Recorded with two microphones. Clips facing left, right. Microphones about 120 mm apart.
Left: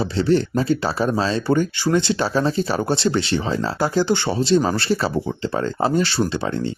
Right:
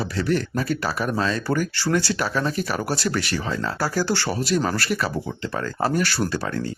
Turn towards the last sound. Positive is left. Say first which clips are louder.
# left 3 dB
turn(degrees=25)  # may be behind; listen again after turning